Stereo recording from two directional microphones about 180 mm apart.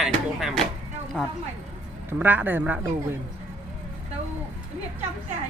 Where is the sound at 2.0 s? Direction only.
10° right (ahead or behind).